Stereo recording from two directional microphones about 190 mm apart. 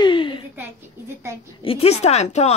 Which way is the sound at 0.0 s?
25° left (ahead or behind).